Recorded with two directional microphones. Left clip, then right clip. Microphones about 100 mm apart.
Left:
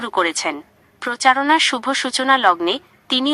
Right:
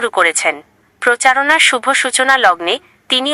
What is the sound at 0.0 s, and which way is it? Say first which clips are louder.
A woman's voice: right 6 dB; 35° left (ahead or behind).